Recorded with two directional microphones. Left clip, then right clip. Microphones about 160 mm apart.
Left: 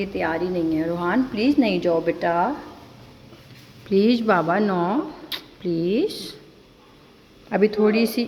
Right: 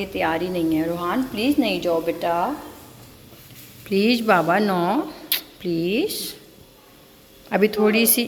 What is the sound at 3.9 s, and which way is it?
Speech, 10° left (ahead or behind).